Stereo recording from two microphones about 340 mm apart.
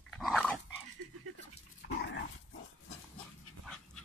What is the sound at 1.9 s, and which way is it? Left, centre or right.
Dog, left.